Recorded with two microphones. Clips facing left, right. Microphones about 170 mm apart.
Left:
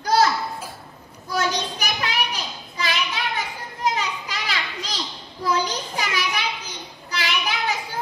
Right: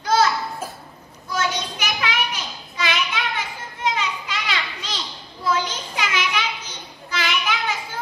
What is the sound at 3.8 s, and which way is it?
Children playing, 40° left (ahead or behind).